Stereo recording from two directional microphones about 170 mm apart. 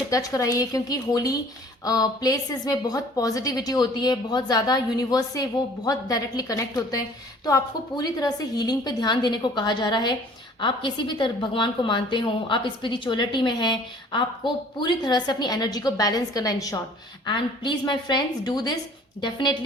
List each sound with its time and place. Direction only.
0.1 s a woman's voice: 20° left (ahead or behind)